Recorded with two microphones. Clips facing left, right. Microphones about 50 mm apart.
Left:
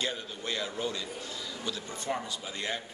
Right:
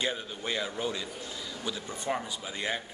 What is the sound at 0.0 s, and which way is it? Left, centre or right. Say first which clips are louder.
A man's voice: right 2 dB; centre.